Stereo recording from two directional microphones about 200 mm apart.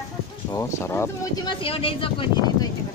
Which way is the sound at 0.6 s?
15° left (ahead or behind).